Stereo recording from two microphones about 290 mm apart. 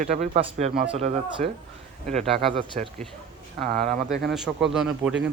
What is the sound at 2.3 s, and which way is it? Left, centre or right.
Speech, centre.